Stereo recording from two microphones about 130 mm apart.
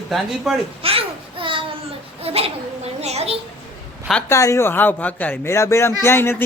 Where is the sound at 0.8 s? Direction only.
45° right (ahead or behind).